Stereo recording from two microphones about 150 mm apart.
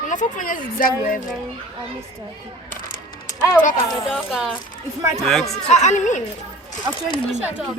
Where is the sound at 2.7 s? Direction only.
65° left (ahead or behind).